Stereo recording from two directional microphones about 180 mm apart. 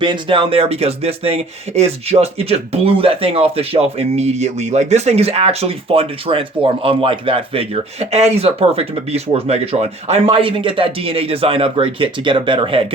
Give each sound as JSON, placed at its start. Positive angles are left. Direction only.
{"t": 0.0, "sound": "speech", "side_deg": -30}